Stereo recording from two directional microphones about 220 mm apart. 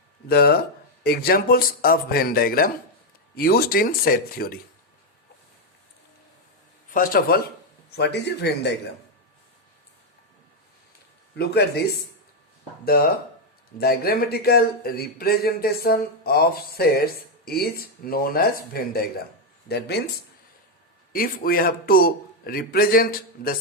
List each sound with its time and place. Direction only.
0.3 s speech: 45° left (ahead or behind)
6.9 s a man's voice: 40° left (ahead or behind)
11.3 s speech: 45° left (ahead or behind)
13.7 s speech: 45° left (ahead or behind)
21.1 s a man's voice: 40° left (ahead or behind)